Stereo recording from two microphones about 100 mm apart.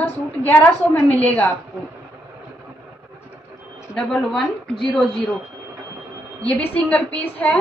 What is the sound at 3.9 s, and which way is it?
Speech, 5° left (ahead or behind).